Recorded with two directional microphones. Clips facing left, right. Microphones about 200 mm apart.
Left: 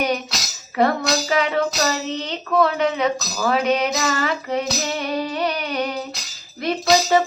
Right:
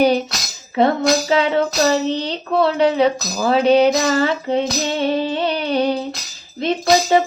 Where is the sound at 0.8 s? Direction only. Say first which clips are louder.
Right 4 dB; 25° right (ahead or behind).